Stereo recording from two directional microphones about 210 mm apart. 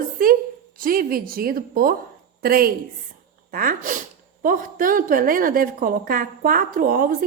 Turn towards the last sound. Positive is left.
turn(degrees=-40)  # may be behind; listen again after turning